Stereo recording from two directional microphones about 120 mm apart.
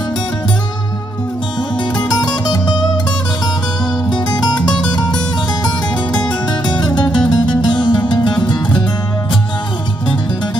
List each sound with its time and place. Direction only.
2.0 s music: 35° left (ahead or behind)
4.1 s music: 40° left (ahead or behind)
6.1 s music: 35° left (ahead or behind)